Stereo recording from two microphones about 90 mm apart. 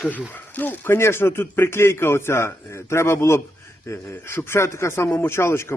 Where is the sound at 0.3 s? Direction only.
20° left (ahead or behind).